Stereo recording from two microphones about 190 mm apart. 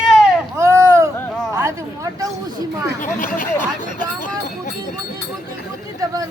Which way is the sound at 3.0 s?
45° left (ahead or behind).